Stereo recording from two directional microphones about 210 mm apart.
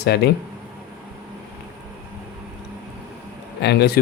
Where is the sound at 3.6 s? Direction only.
50° left (ahead or behind).